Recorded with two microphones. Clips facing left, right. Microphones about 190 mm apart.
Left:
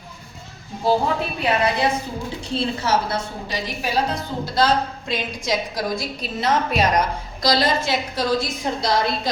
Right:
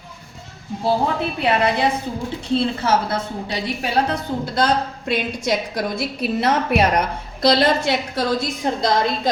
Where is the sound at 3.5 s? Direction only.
60° right (ahead or behind).